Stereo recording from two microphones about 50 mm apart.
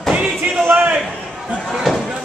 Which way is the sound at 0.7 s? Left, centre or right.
Right.